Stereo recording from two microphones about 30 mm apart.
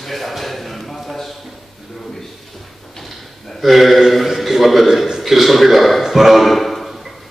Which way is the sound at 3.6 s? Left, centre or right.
Centre.